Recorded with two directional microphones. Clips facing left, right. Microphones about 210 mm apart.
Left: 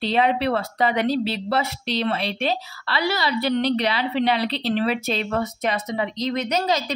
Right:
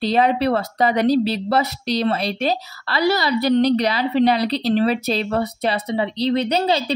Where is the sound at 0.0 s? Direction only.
40° right (ahead or behind).